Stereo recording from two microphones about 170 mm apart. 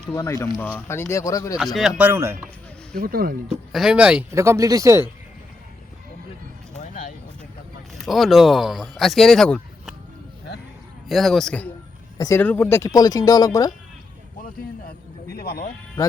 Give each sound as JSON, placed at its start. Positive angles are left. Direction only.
{"t": 0.1, "sound": "speech", "side_deg": 20}
{"t": 1.5, "sound": "speech", "side_deg": 0}
{"t": 2.0, "sound": "speech", "side_deg": -15}
{"t": 2.9, "sound": "speech", "side_deg": -60}
{"t": 3.7, "sound": "speech", "side_deg": -5}
{"t": 7.9, "sound": "speech", "side_deg": 0}
{"t": 11.1, "sound": "speech", "side_deg": 0}
{"t": 12.1, "sound": "speech", "side_deg": 20}
{"t": 14.8, "sound": "a sound", "side_deg": 65}